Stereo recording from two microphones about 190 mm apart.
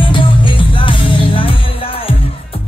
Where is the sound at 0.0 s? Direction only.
25° left (ahead or behind).